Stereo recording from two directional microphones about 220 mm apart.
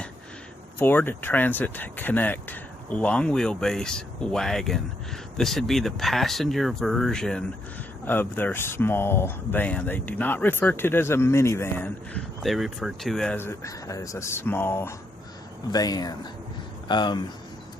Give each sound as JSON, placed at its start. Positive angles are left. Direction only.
{"t": 0.8, "sound": "speech", "side_deg": 10}